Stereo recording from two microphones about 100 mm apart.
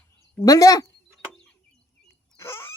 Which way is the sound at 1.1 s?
10° left (ahead or behind).